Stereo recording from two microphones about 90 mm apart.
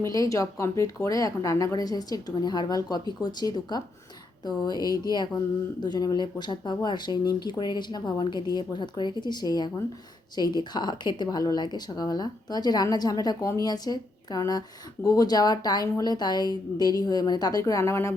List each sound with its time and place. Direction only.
0.0 s speech: 35° left (ahead or behind)